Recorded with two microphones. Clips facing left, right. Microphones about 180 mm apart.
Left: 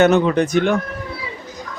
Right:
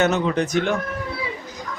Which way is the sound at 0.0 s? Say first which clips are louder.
Left 6 dB; 55° left (ahead or behind).